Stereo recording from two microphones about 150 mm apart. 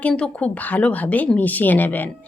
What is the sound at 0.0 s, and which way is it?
Speech, 10° left (ahead or behind).